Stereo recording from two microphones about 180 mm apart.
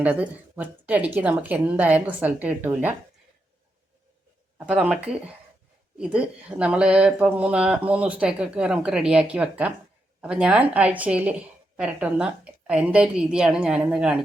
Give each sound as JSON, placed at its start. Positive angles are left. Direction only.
{"t": 0.0, "sound": "speech", "side_deg": -10}
{"t": 4.5, "sound": "a woman's voice", "side_deg": -5}